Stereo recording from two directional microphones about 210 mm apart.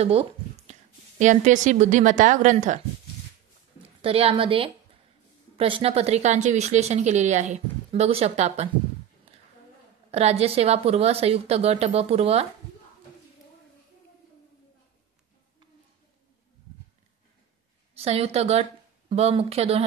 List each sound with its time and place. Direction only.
0.0 s speech: 30° right (ahead or behind)
4.0 s a woman's voice: 25° right (ahead or behind)
10.1 s a woman's voice: 30° right (ahead or behind)
17.9 s a woman's voice: 30° right (ahead or behind)